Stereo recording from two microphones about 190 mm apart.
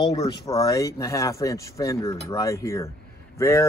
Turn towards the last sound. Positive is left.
turn(degrees=15)  # may be behind; listen again after turning